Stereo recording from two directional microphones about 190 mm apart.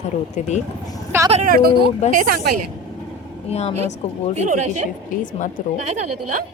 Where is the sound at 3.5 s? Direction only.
35° left (ahead or behind).